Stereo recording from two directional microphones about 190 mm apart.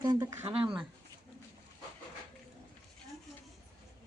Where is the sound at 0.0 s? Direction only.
20° right (ahead or behind).